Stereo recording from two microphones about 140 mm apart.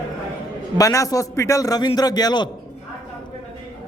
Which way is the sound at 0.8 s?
25° left (ahead or behind).